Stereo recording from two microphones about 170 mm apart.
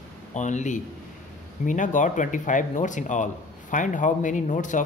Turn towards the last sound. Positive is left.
turn(degrees=50)  # may be behind; listen again after turning